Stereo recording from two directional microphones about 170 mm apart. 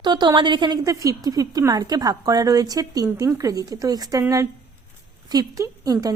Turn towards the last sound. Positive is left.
turn(degrees=-20)  # may be behind; listen again after turning